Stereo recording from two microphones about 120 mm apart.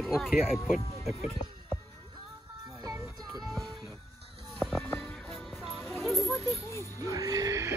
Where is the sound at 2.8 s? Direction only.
30° right (ahead or behind).